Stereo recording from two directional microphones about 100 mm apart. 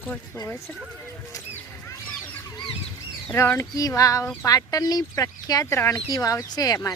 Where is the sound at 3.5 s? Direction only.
30° left (ahead or behind).